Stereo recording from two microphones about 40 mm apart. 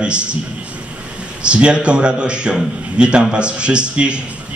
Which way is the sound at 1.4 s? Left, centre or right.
Right.